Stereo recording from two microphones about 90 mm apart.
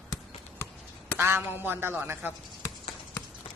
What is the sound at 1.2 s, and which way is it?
A man's voice, 30° right (ahead or behind).